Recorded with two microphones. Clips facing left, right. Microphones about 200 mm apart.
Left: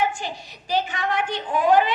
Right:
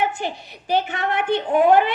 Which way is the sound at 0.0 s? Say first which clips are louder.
Right 2 dB; 60° right (ahead or behind).